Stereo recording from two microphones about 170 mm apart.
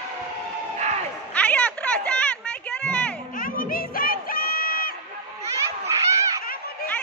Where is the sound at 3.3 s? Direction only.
55° left (ahead or behind).